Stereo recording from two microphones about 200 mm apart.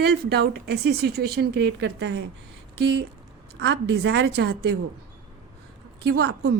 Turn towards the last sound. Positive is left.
turn(degrees=-60)  # may be behind; listen again after turning